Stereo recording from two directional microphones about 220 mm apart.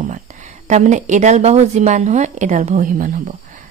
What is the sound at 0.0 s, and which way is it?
A woman's voice, 35° right (ahead or behind).